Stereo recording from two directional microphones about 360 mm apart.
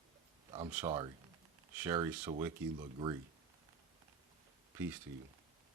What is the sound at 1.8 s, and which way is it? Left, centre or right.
Sigh, centre.